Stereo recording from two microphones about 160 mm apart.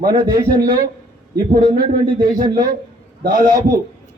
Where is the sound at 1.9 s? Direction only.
60° right (ahead or behind).